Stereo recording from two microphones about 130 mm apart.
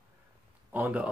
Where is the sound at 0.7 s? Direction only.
10° right (ahead or behind).